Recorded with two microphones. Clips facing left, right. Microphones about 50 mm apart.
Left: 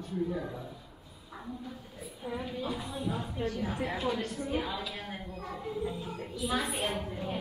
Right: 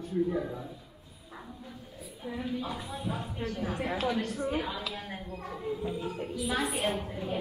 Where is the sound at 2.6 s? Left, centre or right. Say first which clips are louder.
Left 1 dB; right.